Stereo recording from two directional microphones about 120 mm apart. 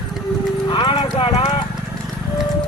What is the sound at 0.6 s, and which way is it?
Clip-clop, 45° left (ahead or behind).